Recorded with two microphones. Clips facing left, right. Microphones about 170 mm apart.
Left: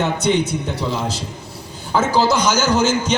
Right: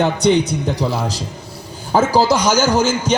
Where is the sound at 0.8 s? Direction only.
35° right (ahead or behind).